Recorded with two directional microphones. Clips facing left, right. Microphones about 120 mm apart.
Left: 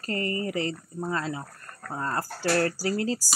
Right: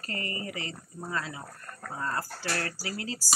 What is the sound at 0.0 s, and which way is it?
Speech, 35° left (ahead or behind).